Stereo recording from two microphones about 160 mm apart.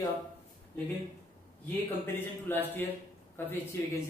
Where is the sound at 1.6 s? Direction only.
10° left (ahead or behind).